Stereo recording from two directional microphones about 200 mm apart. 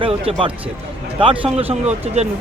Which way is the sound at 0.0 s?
25° right (ahead or behind).